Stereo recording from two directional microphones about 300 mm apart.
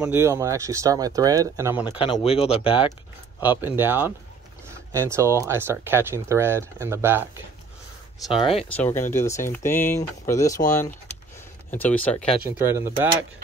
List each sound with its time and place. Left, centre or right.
0.0 s speech: centre
1.9 s speech: centre
3.4 s speech: centre
8.5 s speech: centre
11.7 s speech: centre
12.4 s speech: centre